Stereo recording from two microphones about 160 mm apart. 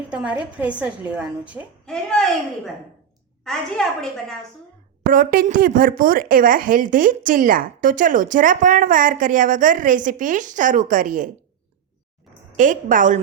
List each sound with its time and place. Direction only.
0.1 s a woman's voice: 10° right (ahead or behind)
1.8 s a woman's voice: 5° left (ahead or behind)
3.4 s a woman's voice: centre (ahead or behind)
5.0 s speech: 60° right (ahead or behind)
12.5 s speech: 55° right (ahead or behind)